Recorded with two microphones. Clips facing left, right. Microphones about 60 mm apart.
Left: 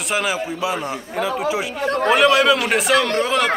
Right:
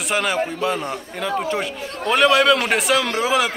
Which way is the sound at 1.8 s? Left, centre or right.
Left.